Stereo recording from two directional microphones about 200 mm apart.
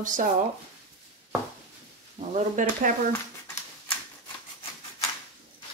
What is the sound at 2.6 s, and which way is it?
Speech, 40° right (ahead or behind).